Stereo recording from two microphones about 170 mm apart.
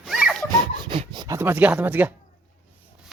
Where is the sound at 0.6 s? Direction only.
30° right (ahead or behind); by 2.1 s 10° right (ahead or behind).